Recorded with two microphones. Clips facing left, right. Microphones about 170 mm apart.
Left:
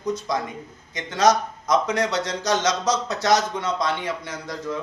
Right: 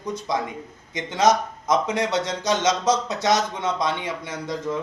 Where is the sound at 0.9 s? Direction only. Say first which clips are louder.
Even; 25° right (ahead or behind).